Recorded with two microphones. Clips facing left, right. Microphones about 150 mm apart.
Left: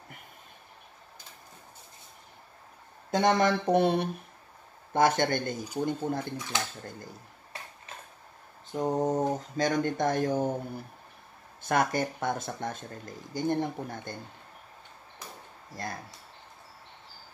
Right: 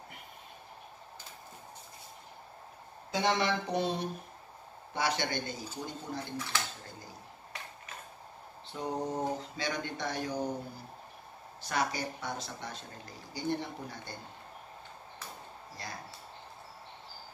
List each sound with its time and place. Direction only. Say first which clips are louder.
3.1 s speech: left 6 dB; 50° left (ahead or behind)
4.9 s speech: left 8 dB; 50° left (ahead or behind)
6.3 s speech: left 3 dB; 15° left (ahead or behind)
9.0 s speech: left 6 dB; 45° left (ahead or behind)
11.6 s speech: left 7 dB; 50° left (ahead or behind)
15.8 s speech: left 7 dB; 50° left (ahead or behind)